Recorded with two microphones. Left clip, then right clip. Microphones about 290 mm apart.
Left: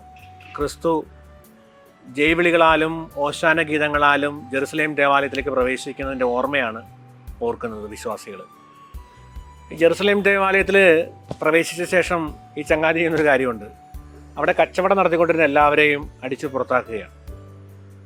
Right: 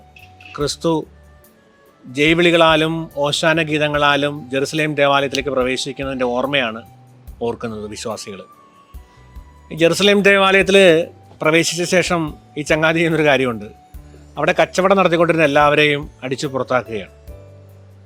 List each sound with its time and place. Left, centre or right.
0.5 s a man's voice: right
2.1 s a man's voice: right
9.6 s a man's voice: right